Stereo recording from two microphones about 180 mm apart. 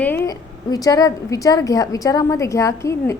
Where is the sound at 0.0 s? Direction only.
15° left (ahead or behind).